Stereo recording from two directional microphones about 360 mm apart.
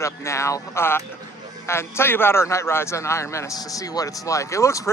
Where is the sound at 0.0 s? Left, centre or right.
Centre.